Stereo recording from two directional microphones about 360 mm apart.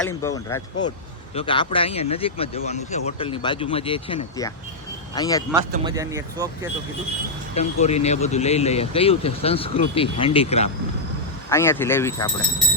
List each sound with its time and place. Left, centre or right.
0.0 s speech: centre
5.8 s speech: centre
7.5 s speech: centre